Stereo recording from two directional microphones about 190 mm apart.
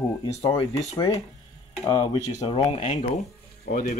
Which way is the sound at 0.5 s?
30° left (ahead or behind).